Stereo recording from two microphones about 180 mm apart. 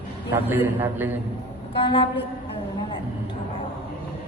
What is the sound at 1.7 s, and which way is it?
Speech, 30° left (ahead or behind).